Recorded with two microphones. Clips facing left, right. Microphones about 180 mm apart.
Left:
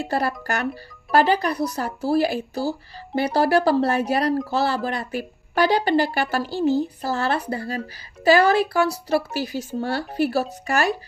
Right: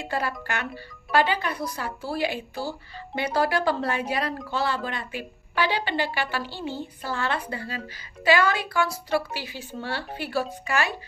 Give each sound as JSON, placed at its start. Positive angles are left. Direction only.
{"t": 0.0, "sound": "speech", "side_deg": 40}